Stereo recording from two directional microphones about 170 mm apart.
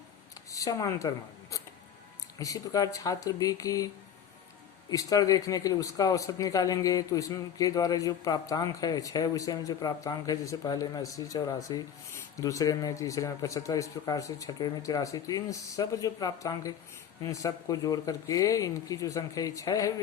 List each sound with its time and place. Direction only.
0.5 s speech: 20° left (ahead or behind)
4.9 s speech: 20° left (ahead or behind)